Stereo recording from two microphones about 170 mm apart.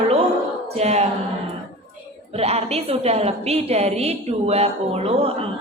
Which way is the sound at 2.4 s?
40° right (ahead or behind).